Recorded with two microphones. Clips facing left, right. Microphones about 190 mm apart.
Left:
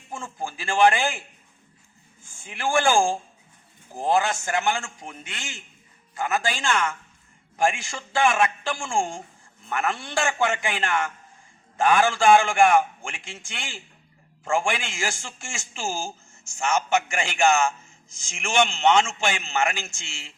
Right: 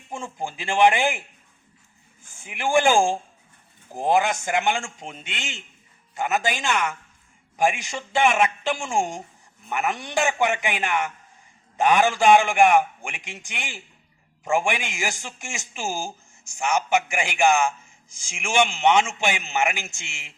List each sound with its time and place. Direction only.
0.1 s a man's voice: 20° right (ahead or behind)
2.4 s a man's voice: 15° right (ahead or behind)